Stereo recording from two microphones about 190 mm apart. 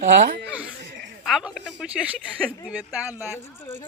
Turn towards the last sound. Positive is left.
turn(degrees=-10)  # may be behind; listen again after turning